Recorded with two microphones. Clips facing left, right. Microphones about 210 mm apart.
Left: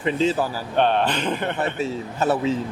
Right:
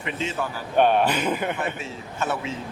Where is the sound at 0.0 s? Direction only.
35° left (ahead or behind).